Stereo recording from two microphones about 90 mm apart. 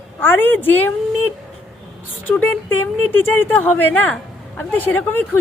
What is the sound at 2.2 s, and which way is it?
A woman's voice, 20° left (ahead or behind).